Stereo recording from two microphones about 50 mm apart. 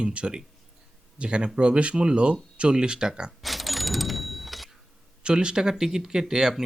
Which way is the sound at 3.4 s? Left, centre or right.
Centre.